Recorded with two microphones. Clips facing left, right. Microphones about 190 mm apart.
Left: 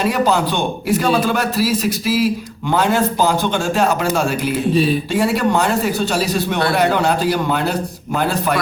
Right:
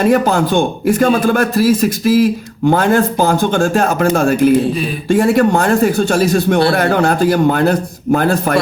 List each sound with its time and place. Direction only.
0.0 s a man's voice: 50° right (ahead or behind)